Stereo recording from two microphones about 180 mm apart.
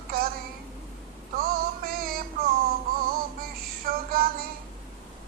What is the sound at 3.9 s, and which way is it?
Child singing, 55° right (ahead or behind).